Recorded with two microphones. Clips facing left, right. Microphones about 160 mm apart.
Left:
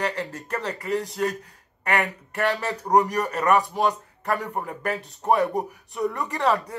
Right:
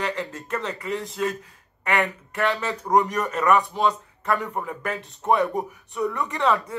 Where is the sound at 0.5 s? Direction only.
35° left (ahead or behind).